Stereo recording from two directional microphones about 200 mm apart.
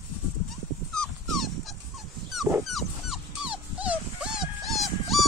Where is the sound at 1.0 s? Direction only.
Centre (ahead or behind).